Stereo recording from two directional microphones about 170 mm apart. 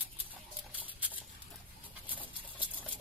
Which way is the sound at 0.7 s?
10° right (ahead or behind).